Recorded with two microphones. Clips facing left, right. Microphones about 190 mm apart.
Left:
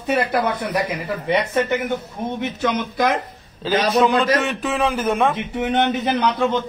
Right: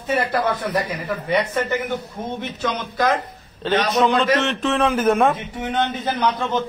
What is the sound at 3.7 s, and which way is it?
A man's voice, 5° left (ahead or behind).